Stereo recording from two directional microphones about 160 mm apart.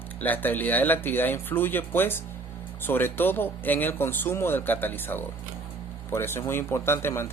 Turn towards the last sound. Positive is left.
turn(degrees=15)  # may be behind; listen again after turning